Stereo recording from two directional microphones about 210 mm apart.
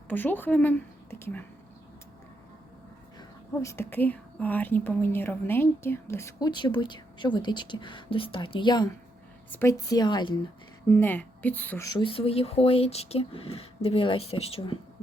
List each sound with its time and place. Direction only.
0.1 s speech: 10° left (ahead or behind)
3.2 s a woman's voice: 15° left (ahead or behind)
10.8 s a woman's voice: 10° left (ahead or behind); by 14.8 s 25° left (ahead or behind)